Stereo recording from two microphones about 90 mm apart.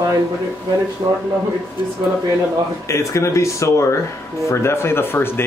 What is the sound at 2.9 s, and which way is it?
Speech, 35° left (ahead or behind).